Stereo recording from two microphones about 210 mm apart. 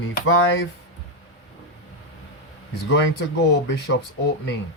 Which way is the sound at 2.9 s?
60° left (ahead or behind).